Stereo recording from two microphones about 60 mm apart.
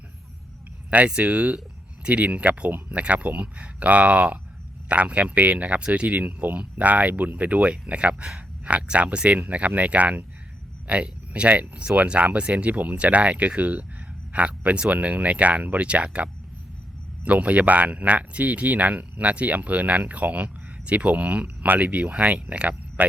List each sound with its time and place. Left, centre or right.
0.9 s speech: right
17.2 s speech: right